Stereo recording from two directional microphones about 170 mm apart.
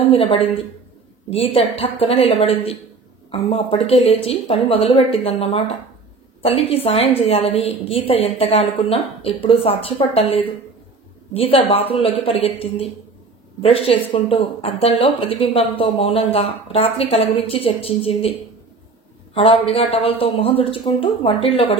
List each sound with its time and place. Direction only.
0.0 s speech: 30° left (ahead or behind)
19.3 s speech: 35° left (ahead or behind)